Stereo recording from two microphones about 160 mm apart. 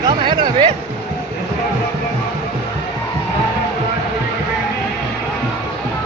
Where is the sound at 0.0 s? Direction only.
30° right (ahead or behind).